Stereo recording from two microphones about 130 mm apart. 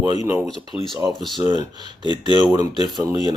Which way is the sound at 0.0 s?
30° right (ahead or behind).